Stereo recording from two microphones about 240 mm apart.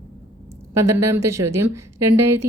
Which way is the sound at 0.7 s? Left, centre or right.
Right.